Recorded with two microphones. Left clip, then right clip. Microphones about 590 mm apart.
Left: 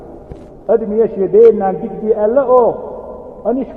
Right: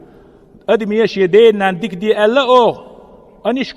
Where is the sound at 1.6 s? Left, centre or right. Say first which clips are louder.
Even; right.